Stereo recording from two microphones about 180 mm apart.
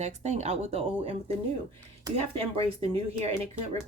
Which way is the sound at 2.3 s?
35° right (ahead or behind).